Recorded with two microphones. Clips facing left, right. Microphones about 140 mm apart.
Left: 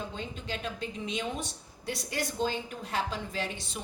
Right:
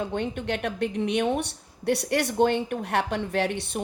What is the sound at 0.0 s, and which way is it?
A woman's voice, 65° right (ahead or behind).